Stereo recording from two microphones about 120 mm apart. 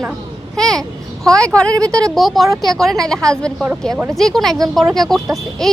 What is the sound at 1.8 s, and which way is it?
Speech, 30° right (ahead or behind).